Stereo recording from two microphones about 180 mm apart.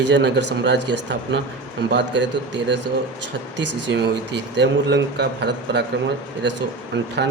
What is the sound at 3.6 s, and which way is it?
Speech, 75° right (ahead or behind).